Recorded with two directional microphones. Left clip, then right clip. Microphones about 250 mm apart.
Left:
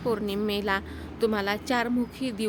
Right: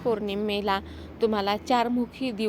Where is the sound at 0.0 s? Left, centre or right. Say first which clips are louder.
Right 1 dB; centre.